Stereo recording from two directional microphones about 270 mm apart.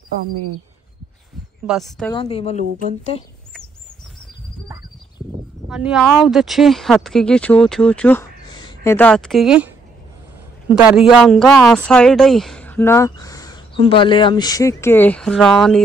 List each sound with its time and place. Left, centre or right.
1.7 s speech: centre
2.1 s speech: left
5.7 s speech: centre
10.7 s speech: centre